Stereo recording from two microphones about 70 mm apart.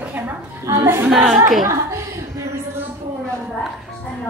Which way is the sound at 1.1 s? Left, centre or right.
Centre.